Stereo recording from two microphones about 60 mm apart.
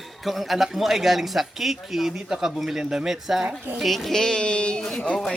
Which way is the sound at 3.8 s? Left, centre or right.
Centre.